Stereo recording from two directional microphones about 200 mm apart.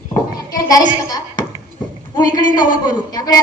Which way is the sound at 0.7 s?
20° left (ahead or behind).